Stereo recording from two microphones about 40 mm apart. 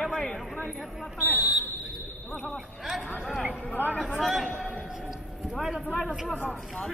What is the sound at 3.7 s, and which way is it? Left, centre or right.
Speech, left.